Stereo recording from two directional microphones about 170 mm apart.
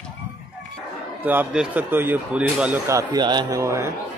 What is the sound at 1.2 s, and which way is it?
Speech, 10° right (ahead or behind).